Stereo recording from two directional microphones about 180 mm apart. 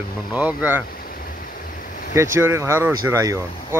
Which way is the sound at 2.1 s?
15° right (ahead or behind).